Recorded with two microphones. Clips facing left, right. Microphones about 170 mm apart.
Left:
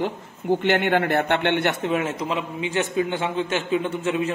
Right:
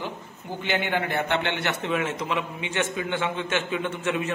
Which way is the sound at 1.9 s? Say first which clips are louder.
Left 3 dB; 40° left (ahead or behind).